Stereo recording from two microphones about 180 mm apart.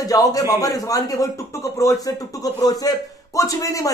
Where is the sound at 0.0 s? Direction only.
20° left (ahead or behind).